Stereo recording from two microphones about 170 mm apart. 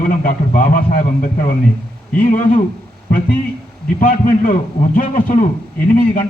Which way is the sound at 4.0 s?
55° left (ahead or behind).